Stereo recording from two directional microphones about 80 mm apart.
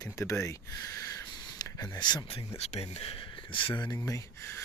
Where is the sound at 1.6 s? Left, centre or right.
Left.